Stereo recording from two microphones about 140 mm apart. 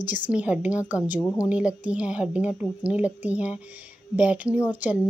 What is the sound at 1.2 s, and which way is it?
Speech, 20° left (ahead or behind).